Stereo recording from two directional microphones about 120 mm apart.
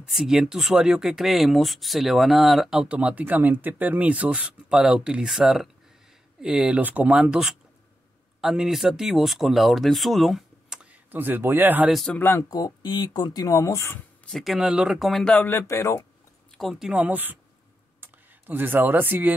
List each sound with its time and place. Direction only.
0.0 s speech: 5° right (ahead or behind)
11.9 s speech: centre (ahead or behind)
12.2 s speech: 15° left (ahead or behind)
12.4 s speech: 30° left (ahead or behind)
14.2 s speech: centre (ahead or behind)
15.3 s speech: 20° left (ahead or behind)
16.5 s speech: centre (ahead or behind)
16.9 s speech: 10° right (ahead or behind)